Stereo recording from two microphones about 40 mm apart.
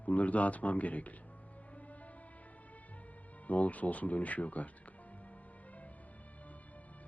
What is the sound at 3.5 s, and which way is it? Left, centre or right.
Speech, left.